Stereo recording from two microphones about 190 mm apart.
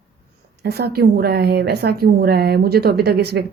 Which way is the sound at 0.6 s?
55° right (ahead or behind).